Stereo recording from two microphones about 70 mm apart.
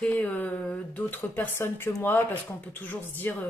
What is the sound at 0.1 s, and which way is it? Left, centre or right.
Speech, left.